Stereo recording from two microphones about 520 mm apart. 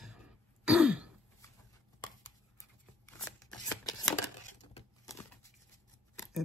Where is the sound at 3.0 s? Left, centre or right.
Centre.